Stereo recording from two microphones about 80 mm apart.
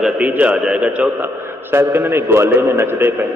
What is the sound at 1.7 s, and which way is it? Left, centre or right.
A man's voice, right.